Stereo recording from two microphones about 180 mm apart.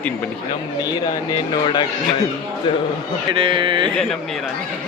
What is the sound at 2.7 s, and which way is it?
Speech, 25° left (ahead or behind).